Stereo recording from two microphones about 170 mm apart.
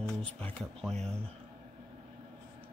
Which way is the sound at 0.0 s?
5° left (ahead or behind).